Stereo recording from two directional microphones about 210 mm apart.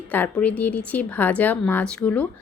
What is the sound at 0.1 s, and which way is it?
Speech, 5° left (ahead or behind).